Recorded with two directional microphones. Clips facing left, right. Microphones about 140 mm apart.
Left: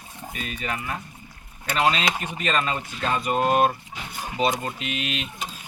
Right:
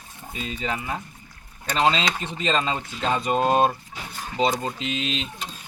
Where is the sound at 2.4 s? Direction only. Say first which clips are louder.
Right 1 dB; 25° right (ahead or behind).